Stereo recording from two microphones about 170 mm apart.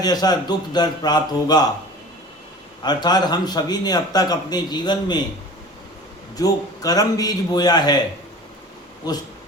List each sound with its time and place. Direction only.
0.0 s a man's voice: 25° left (ahead or behind)
2.8 s a man's voice: 25° left (ahead or behind)
6.3 s a man's voice: 20° left (ahead or behind)